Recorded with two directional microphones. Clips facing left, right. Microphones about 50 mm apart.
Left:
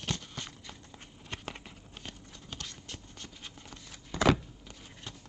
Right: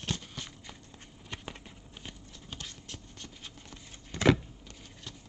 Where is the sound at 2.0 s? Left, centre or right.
Centre.